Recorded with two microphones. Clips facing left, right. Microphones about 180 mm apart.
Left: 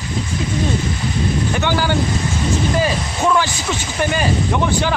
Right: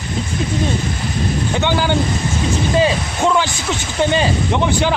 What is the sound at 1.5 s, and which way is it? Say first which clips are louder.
Speech: right 3 dB; 20° right (ahead or behind).